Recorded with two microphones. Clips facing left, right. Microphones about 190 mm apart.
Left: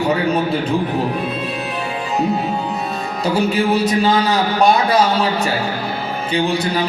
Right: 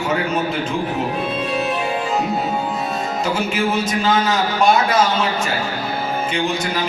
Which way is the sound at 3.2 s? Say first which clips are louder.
Left 5 dB; 35° left (ahead or behind).